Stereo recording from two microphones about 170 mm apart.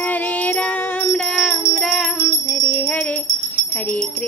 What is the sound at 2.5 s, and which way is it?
Jingle bell, 5° left (ahead or behind).